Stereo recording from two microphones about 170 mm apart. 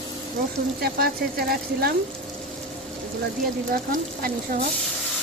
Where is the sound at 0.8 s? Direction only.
65° right (ahead or behind).